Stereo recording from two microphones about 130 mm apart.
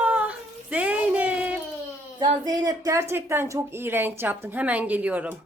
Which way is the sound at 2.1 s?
30° right (ahead or behind).